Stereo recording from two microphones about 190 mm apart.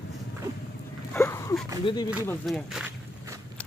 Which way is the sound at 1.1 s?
15° left (ahead or behind).